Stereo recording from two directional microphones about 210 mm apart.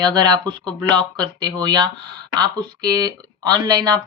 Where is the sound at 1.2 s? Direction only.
20° right (ahead or behind).